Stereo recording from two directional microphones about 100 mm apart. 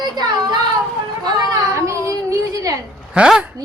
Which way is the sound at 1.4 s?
35° right (ahead or behind).